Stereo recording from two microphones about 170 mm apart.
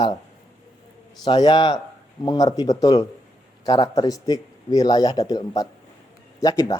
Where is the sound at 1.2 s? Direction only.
25° left (ahead or behind).